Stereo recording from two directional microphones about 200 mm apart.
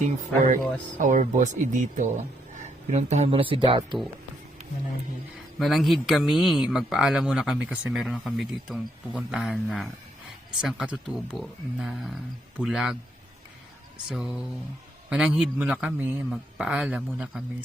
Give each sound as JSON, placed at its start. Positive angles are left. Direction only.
{"t": 0.9, "sound": "speech", "side_deg": -40}
{"t": 5.5, "sound": "speech", "side_deg": 0}
{"t": 14.1, "sound": "speech", "side_deg": -5}